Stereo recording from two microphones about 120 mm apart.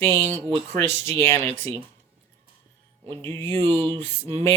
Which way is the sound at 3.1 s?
20° left (ahead or behind).